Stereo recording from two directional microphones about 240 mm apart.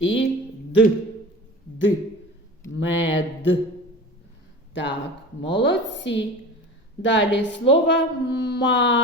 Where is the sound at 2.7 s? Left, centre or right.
Left.